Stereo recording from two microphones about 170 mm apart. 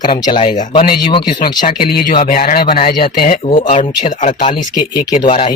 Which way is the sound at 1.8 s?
60° left (ahead or behind).